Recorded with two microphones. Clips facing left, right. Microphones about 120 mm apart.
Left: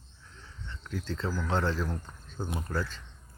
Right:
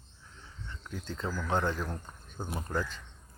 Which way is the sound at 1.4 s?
15° right (ahead or behind).